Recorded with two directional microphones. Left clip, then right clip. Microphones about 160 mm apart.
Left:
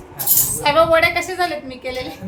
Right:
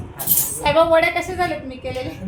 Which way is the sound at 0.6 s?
20° right (ahead or behind).